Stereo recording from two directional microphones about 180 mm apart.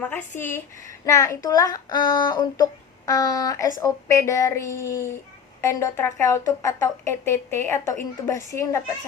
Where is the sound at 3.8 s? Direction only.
20° left (ahead or behind).